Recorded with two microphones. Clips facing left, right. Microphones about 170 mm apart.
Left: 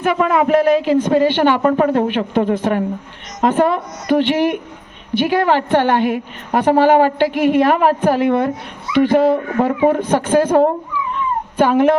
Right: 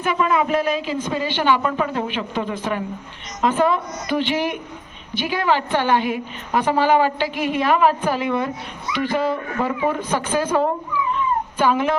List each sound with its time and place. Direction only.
0.0 s a woman's voice: 60° left (ahead or behind)